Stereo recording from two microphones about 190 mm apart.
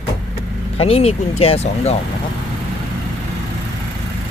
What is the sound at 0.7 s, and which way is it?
Speech, 30° left (ahead or behind).